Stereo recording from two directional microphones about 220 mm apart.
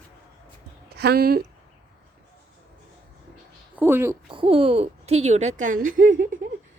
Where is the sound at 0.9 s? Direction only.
45° right (ahead or behind).